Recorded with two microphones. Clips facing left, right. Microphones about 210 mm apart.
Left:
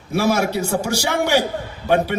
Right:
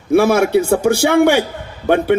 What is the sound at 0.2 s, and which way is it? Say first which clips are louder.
A man's voice: right 4 dB; 55° right (ahead or behind).